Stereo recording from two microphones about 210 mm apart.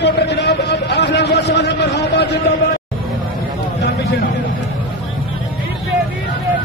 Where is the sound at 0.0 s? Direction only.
55° left (ahead or behind).